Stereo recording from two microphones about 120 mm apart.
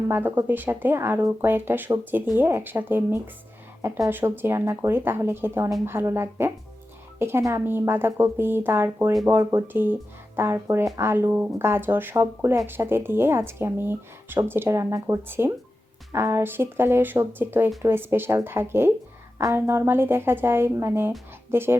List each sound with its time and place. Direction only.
0.1 s speech: 20° right (ahead or behind)
3.8 s speech: 30° right (ahead or behind)